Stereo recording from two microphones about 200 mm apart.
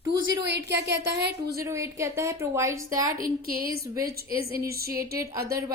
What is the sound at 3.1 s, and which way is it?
Speech, 45° right (ahead or behind).